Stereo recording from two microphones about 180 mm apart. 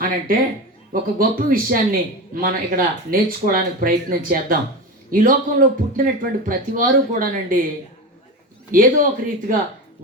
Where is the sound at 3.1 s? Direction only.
55° right (ahead or behind).